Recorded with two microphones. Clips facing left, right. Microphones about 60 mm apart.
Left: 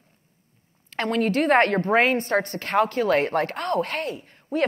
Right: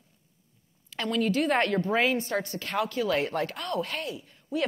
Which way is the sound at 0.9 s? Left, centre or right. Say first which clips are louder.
Left 4 dB; left.